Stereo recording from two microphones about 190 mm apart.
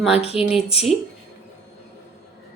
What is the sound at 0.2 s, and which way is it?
Speech, 30° left (ahead or behind).